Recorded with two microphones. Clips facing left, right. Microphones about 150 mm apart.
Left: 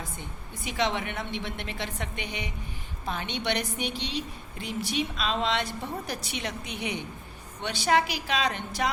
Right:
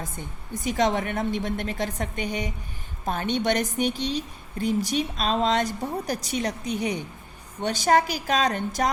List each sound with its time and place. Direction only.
0.0 s a woman's voice: 45° right (ahead or behind)